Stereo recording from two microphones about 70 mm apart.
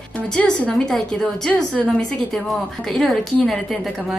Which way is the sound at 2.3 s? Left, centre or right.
Centre.